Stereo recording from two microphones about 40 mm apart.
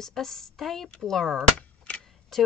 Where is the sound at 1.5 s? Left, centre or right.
Left.